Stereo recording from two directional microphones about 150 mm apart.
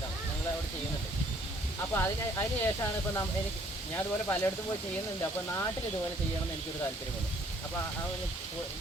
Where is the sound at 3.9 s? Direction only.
15° left (ahead or behind).